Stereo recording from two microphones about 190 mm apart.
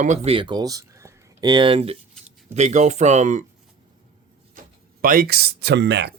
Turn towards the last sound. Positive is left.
turn(degrees=-60)  # may be behind; listen again after turning